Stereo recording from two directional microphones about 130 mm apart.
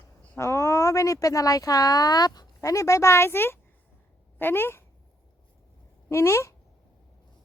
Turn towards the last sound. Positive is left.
turn(degrees=20)  # may be behind; listen again after turning